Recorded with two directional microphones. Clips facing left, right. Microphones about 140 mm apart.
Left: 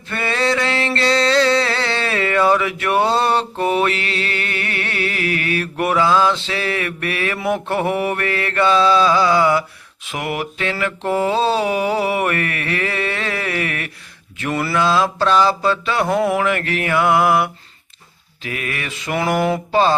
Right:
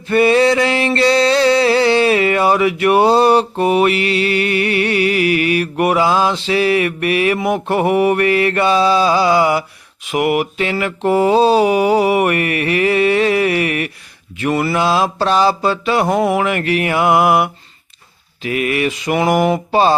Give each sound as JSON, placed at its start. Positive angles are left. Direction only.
{"t": 0.1, "sound": "mantra", "side_deg": -15}